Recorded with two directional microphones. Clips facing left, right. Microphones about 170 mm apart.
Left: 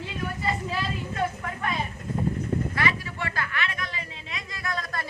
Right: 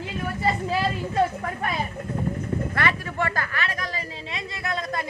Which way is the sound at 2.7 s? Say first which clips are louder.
Right 3 dB; 55° right (ahead or behind).